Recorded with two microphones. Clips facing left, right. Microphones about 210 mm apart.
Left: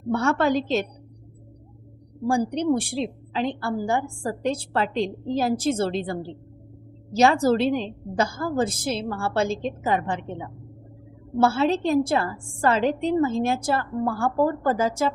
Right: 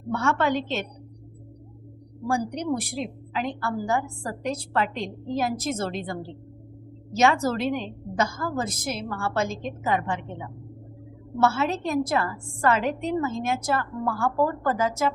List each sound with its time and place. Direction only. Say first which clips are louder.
0.1 s a woman's voice: left 3 dB; 35° left (ahead or behind)
2.2 s a woman's voice: left 5 dB; 30° left (ahead or behind)
11.3 s a woman's voice: left 3 dB; 30° left (ahead or behind)